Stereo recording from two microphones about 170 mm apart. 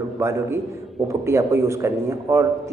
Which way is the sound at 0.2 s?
15° right (ahead or behind).